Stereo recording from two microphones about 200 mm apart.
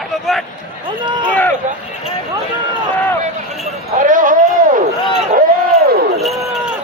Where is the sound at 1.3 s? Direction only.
10° left (ahead or behind).